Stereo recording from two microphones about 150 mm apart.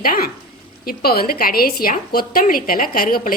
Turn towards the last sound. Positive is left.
turn(degrees=70)  # may be behind; listen again after turning